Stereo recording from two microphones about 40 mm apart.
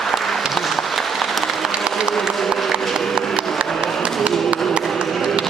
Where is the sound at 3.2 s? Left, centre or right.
Right.